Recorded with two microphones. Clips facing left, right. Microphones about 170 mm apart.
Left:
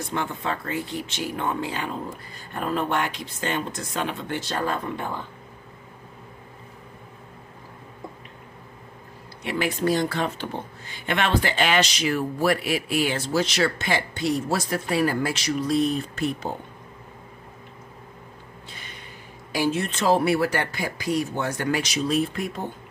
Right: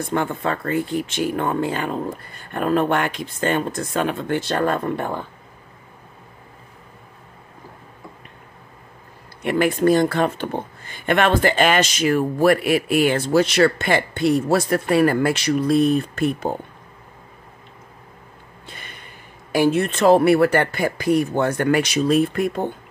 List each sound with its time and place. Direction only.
0.1 s speech: 50° right (ahead or behind)
9.4 s speech: 50° right (ahead or behind)
18.7 s a sound: 55° right (ahead or behind)
19.5 s speech: 55° right (ahead or behind)